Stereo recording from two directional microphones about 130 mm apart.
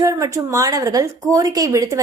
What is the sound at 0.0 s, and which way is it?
A woman's voice, 25° right (ahead or behind).